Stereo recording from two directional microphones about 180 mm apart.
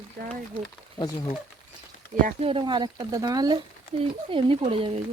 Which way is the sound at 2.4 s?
25° right (ahead or behind).